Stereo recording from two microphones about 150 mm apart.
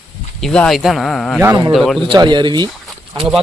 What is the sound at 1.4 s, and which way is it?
Speech, 20° right (ahead or behind).